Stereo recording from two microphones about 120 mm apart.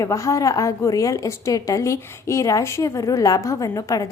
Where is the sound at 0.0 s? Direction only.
25° left (ahead or behind).